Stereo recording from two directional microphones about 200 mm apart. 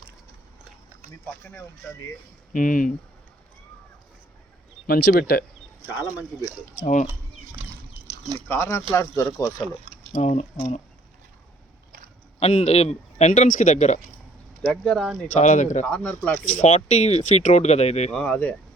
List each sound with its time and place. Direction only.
2.5 s speech: 40° left (ahead or behind)
4.9 s speech: 50° left (ahead or behind)
6.8 s speech: 35° left (ahead or behind)
8.4 s speech: 15° left (ahead or behind)
10.1 s speech: 35° left (ahead or behind)
12.4 s speech: 30° left (ahead or behind)
14.6 s speech: 5° left (ahead or behind)
15.4 s speech: 35° left (ahead or behind)
15.8 s speech: 5° left (ahead or behind)
16.4 s speech: 40° left (ahead or behind)
18.1 s speech: 5° left (ahead or behind)